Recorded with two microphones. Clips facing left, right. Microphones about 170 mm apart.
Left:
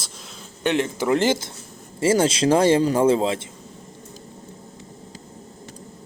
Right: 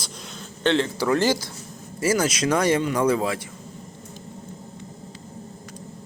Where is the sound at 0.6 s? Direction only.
15° left (ahead or behind).